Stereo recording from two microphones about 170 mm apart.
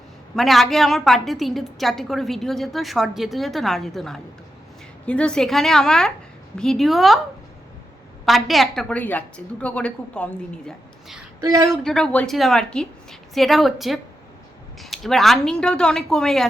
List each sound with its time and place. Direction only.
0.3 s a woman's voice: centre (ahead or behind)
8.2 s a woman's voice: centre (ahead or behind)
11.3 s speech: 20° right (ahead or behind)
11.7 s a woman's voice: 5° left (ahead or behind)